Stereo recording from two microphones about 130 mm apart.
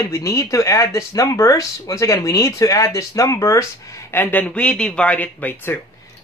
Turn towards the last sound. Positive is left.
turn(degrees=15)  # may be behind; listen again after turning